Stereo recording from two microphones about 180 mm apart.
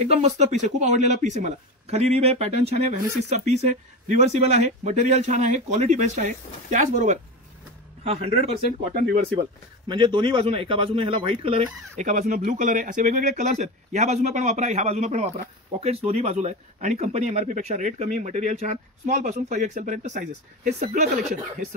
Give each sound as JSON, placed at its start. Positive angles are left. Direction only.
{"t": 0.0, "sound": "speech", "side_deg": -35}
{"t": 9.8, "sound": "speech", "side_deg": -25}